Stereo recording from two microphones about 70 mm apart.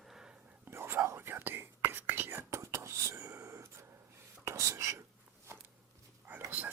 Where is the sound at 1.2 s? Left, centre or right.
Right.